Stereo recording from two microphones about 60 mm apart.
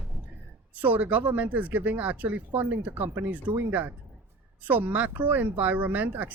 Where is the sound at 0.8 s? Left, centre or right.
Right.